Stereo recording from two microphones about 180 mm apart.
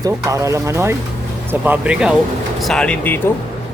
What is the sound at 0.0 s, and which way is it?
Speech, 15° right (ahead or behind).